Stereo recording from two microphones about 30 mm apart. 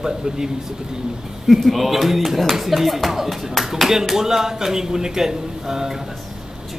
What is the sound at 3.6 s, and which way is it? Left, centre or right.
Clapping, centre.